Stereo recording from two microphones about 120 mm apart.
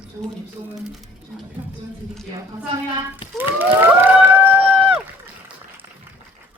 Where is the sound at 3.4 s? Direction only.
15° right (ahead or behind).